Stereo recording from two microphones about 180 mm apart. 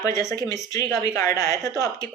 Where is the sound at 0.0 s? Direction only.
15° left (ahead or behind).